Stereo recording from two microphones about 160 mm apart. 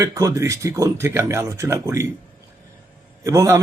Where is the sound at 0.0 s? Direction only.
20° right (ahead or behind).